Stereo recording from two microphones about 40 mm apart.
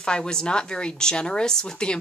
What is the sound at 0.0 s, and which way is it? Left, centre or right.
Speech, centre.